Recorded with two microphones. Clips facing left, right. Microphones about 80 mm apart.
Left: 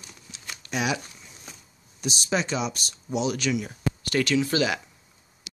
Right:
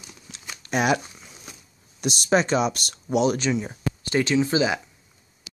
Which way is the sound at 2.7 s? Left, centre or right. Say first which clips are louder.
Right 6 dB; right.